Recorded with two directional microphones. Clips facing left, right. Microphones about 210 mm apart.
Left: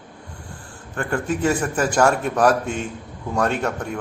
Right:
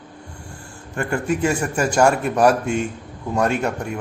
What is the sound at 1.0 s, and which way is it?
A man's voice, 10° right (ahead or behind).